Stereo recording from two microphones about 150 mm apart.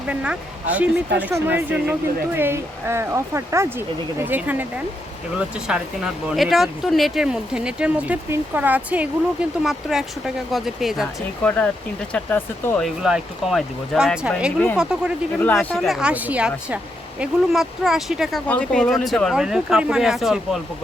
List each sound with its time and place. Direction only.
0.1 s speech: 10° right (ahead or behind)
11.4 s speech: 10° left (ahead or behind)
12.8 s speech: 5° right (ahead or behind)
15.4 s speech: 15° left (ahead or behind)